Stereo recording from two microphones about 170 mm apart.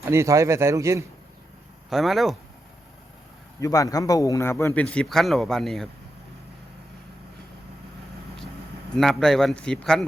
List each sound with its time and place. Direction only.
0.0 s speech: 15° right (ahead or behind)
1.9 s a man's voice: centre (ahead or behind)
3.6 s speech: 20° left (ahead or behind); by 5.9 s centre (ahead or behind)
9.0 s a man's voice: 5° left (ahead or behind)